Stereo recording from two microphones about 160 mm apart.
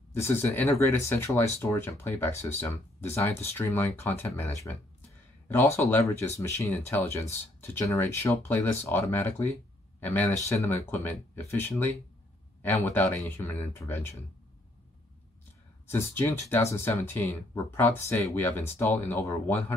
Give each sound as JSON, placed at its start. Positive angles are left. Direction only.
{"t": 0.1, "sound": "speech", "side_deg": 15}
{"t": 5.8, "sound": "speech", "side_deg": 15}
{"t": 15.9, "sound": "speech", "side_deg": 15}